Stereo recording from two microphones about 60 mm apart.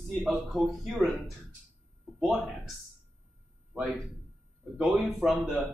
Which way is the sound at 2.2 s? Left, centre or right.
Centre.